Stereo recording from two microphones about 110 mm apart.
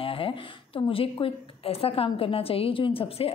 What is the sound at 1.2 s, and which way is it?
A woman's voice, 65° left (ahead or behind).